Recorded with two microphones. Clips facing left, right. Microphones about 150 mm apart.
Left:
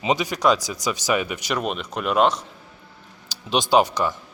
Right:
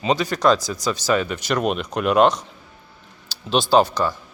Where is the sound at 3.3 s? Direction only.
15° left (ahead or behind).